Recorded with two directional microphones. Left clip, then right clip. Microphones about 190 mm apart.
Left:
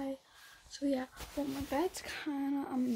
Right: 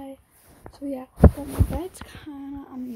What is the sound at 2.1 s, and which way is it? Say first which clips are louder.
Speech: left 1 dB; 25° left (ahead or behind).